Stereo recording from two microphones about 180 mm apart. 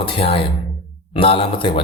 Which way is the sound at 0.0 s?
30° left (ahead or behind).